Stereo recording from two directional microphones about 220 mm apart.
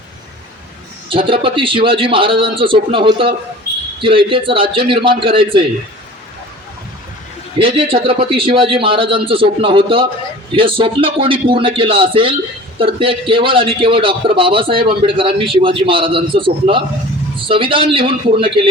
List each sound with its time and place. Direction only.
1.1 s a man's voice: 25° right (ahead or behind)
7.6 s a man's voice: 25° right (ahead or behind)